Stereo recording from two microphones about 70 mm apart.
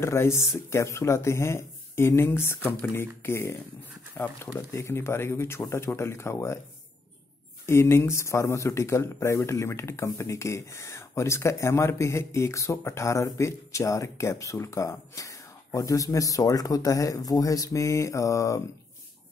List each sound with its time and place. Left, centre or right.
0.0 s speech: left
7.6 s speech: left